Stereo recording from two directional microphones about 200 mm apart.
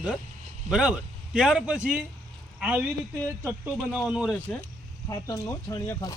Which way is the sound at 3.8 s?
5° right (ahead or behind).